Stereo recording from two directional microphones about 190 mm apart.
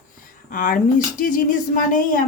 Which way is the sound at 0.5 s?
45° left (ahead or behind).